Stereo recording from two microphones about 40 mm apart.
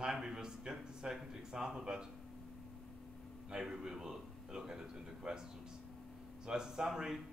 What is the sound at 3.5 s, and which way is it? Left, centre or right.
Speech, centre.